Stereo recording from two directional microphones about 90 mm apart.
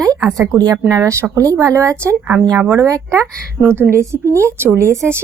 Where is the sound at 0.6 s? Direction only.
40° right (ahead or behind).